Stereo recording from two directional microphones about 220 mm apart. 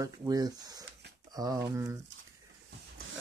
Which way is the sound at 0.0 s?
15° right (ahead or behind).